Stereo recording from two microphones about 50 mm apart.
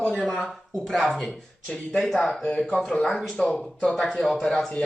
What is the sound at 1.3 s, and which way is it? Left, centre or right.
Speech, centre.